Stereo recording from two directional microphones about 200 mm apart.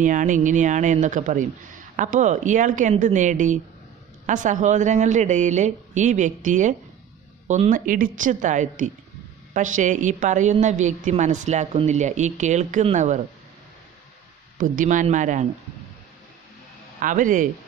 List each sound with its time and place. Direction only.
0.0 s a woman's voice: 40° right (ahead or behind)
14.6 s a woman's voice: 40° right (ahead or behind)
17.0 s a woman's voice: 40° right (ahead or behind)